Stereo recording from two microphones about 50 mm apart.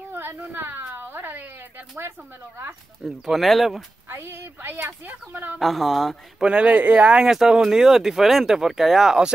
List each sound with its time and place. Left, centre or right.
0.1 s a woman's voice: right
2.0 s speech: right
3.3 s speech: centre
4.1 s speech: right
5.0 s speech: right
5.6 s speech: centre
6.4 s speech: right
7.2 s speech: centre